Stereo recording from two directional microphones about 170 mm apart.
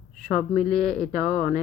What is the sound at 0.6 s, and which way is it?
Speech, 5° left (ahead or behind).